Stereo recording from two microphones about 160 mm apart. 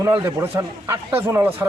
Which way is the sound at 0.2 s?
20° right (ahead or behind).